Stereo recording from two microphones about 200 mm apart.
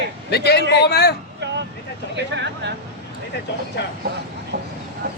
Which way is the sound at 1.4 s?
60° right (ahead or behind).